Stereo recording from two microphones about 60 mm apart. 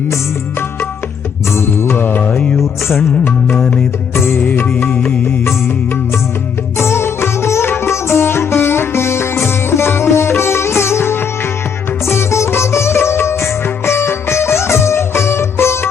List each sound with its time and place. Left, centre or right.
1.5 s music: left
4.1 s music: left
6.7 s sitar: left